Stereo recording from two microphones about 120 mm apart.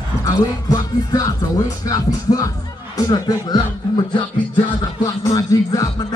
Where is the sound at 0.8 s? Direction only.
30° left (ahead or behind).